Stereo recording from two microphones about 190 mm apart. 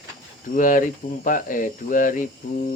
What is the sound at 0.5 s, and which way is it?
Speech, 45° left (ahead or behind).